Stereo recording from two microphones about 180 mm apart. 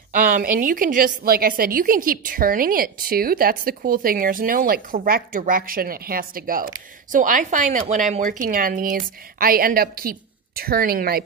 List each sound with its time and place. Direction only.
0.1 s a woman's voice: 50° right (ahead or behind)